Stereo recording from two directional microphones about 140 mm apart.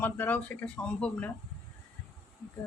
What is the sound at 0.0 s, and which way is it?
Speech, 10° left (ahead or behind).